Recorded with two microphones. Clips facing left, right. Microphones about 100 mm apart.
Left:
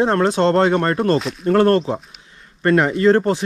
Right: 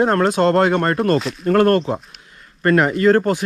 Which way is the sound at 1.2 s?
Centre (ahead or behind).